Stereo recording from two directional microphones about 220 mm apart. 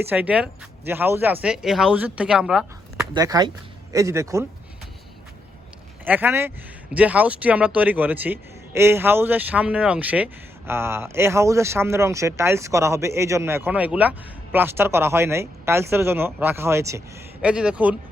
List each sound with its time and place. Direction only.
0.0 s speech: 10° right (ahead or behind)
3.2 s speech: 15° right (ahead or behind)
6.1 s speech: 10° right (ahead or behind)